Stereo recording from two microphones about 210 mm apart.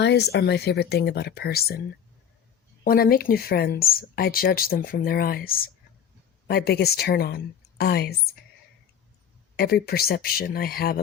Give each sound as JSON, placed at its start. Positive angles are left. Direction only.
{"t": 0.0, "sound": "speech", "side_deg": 50}
{"t": 2.8, "sound": "speech", "side_deg": 45}
{"t": 9.6, "sound": "speech", "side_deg": 50}